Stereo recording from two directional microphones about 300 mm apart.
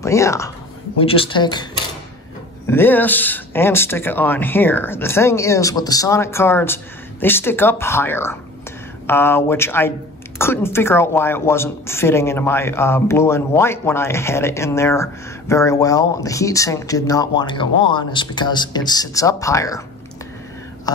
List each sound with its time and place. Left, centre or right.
0.0 s a woman's voice: centre